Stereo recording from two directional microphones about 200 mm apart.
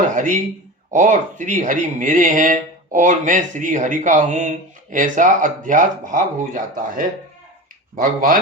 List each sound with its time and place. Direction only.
0.1 s speech: 40° right (ahead or behind)